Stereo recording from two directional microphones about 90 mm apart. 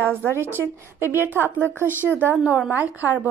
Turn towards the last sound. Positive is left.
turn(degrees=-20)  # may be behind; listen again after turning